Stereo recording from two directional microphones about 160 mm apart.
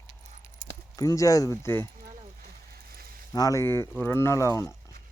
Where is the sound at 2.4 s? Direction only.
70° right (ahead or behind).